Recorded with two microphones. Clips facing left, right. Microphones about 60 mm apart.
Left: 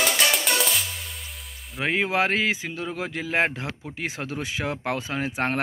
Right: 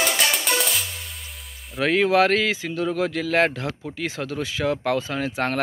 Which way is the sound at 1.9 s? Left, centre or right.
Left.